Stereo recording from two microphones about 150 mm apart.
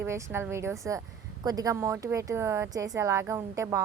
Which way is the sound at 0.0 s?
15° right (ahead or behind).